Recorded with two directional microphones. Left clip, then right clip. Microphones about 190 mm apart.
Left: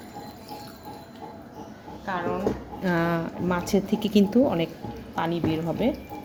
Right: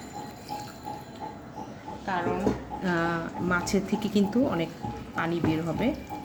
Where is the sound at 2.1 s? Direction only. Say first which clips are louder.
Left 1 dB; 20° left (ahead or behind).